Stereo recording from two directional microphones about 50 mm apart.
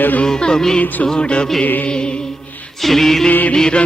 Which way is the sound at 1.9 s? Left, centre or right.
Centre.